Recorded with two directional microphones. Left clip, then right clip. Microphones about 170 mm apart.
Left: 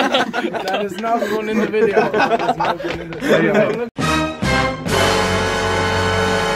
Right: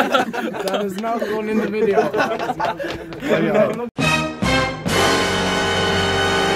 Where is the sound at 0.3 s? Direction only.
85° right.